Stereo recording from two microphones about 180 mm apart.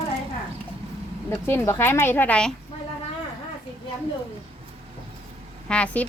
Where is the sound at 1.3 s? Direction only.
10° left (ahead or behind).